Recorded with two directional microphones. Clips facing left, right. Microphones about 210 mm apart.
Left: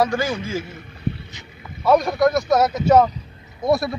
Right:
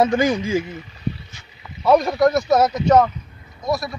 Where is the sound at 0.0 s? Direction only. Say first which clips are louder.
Right 4 dB; 20° right (ahead or behind).